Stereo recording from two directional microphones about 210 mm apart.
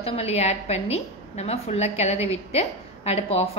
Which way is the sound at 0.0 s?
30° left (ahead or behind).